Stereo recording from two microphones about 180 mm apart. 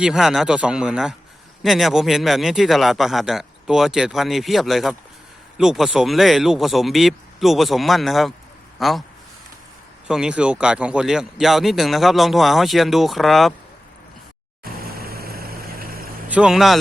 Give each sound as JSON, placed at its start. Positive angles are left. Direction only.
{"t": 0.0, "sound": "a man's voice", "side_deg": 0}
{"t": 10.1, "sound": "a man's voice", "side_deg": -5}
{"t": 14.6, "sound": "vehicle", "side_deg": -55}
{"t": 16.3, "sound": "a man's voice", "side_deg": -5}